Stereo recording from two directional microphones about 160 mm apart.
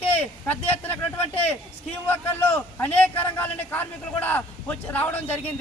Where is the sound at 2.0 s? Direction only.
10° left (ahead or behind).